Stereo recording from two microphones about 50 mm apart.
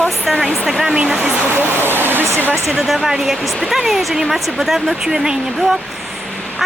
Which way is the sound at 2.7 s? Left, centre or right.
Centre.